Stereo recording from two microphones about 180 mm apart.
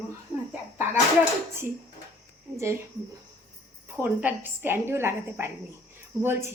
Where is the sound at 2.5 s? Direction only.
15° right (ahead or behind).